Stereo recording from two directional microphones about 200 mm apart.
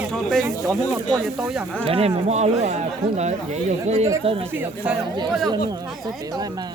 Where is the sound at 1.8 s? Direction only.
30° right (ahead or behind).